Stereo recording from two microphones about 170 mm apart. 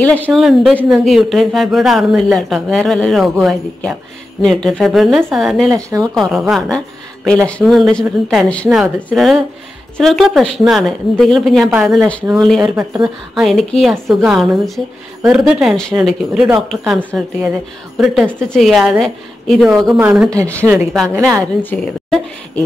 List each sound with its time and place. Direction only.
0.0 s a woman's voice: 5° left (ahead or behind)
5.7 s speech: 20° right (ahead or behind)
6.1 s a woman's voice: centre (ahead or behind)